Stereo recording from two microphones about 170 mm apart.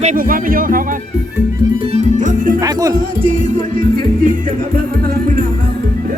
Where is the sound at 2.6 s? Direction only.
20° right (ahead or behind).